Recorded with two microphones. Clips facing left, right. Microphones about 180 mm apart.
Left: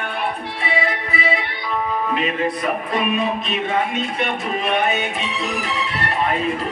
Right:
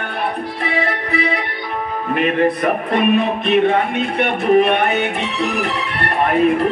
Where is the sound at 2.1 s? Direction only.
60° right (ahead or behind).